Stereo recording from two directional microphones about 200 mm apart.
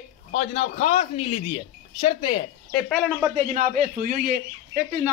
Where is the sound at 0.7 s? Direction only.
30° left (ahead or behind).